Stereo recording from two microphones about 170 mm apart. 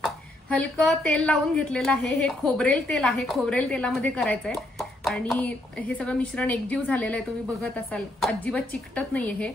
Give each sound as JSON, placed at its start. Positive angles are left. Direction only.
{"t": 0.6, "sound": "a woman's voice", "side_deg": 5}